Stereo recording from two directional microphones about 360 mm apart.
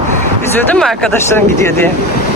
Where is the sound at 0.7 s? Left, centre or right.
Centre.